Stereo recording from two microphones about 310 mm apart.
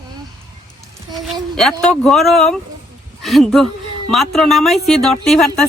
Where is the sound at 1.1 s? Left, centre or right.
Centre.